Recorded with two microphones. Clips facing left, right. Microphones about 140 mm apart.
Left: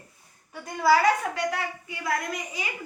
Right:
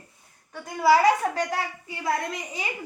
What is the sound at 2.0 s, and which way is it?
Speech, 30° right (ahead or behind).